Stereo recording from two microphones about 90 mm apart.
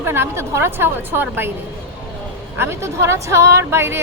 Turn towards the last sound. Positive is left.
turn(degrees=-30)  # may be behind; listen again after turning